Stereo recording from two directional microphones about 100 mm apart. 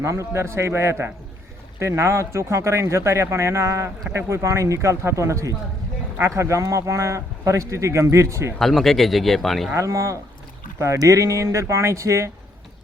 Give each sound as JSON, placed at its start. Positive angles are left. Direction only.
{"t": 0.0, "sound": "speech", "side_deg": -30}
{"t": 8.5, "sound": "speech", "side_deg": 0}
{"t": 9.7, "sound": "speech", "side_deg": -30}